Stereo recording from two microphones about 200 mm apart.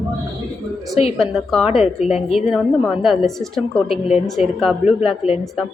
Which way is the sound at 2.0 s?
30° left (ahead or behind).